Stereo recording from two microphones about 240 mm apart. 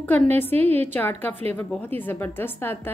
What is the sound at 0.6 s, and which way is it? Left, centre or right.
Speech, right.